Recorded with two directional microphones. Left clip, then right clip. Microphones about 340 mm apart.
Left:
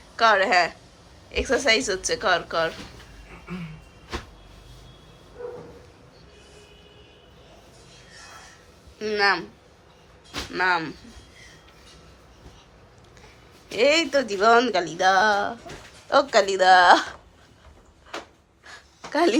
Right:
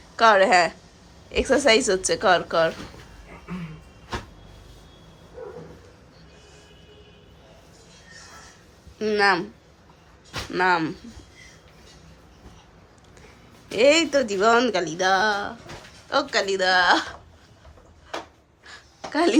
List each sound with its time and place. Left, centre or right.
0.2 s speech: centre
9.0 s speech: centre
10.5 s speech: centre
13.7 s speech: centre
18.6 s a sound: centre